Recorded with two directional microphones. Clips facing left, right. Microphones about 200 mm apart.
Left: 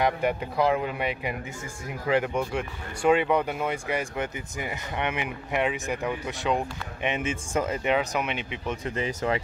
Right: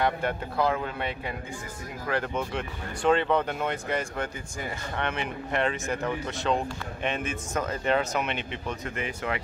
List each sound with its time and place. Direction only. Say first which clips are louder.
0.0 s speech: left 2 dB; 15° left (ahead or behind)
8.6 s speech: left 5 dB; 30° left (ahead or behind)